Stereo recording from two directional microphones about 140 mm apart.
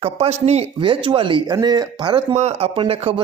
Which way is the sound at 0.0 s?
45° right (ahead or behind).